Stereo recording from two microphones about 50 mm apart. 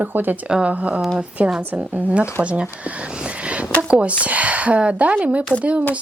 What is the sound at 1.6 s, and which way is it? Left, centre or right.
Speech, right.